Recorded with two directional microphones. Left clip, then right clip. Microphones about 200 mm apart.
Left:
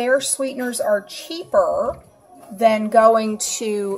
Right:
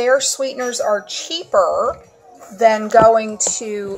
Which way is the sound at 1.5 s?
25° right (ahead or behind).